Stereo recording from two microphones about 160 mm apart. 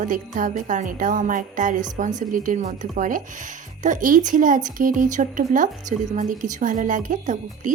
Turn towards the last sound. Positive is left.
turn(degrees=-50)  # may be behind; listen again after turning